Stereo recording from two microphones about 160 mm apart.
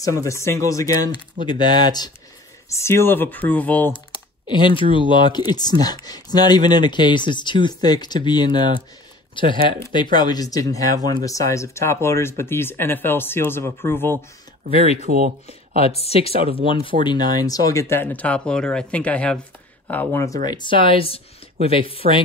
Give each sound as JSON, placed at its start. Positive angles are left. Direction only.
{"t": 0.0, "sound": "speech", "side_deg": 20}
{"t": 4.5, "sound": "speech", "side_deg": 30}
{"t": 15.0, "sound": "speech", "side_deg": -60}
{"t": 15.4, "sound": "speech", "side_deg": 40}
{"t": 17.0, "sound": "speech", "side_deg": 25}
{"t": 20.4, "sound": "speech", "side_deg": 30}